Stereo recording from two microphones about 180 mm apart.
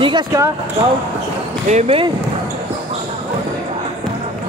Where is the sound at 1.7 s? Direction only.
35° right (ahead or behind).